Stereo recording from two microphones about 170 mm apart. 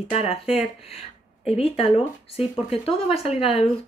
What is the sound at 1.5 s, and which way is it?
Speech, 35° left (ahead or behind).